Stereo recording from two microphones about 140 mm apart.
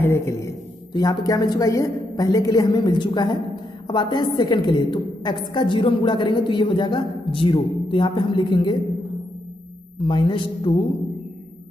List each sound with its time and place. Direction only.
0.0 s a woman's voice: 20° left (ahead or behind)
9.9 s a woman's voice: 35° left (ahead or behind)